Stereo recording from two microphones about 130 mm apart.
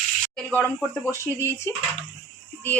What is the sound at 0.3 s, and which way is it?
A woman's voice, 10° left (ahead or behind).